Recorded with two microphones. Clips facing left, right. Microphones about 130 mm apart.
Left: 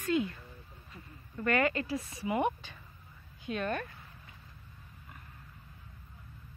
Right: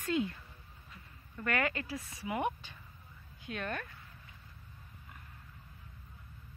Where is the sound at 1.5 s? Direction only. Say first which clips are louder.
Left 4 dB; 5° right (ahead or behind).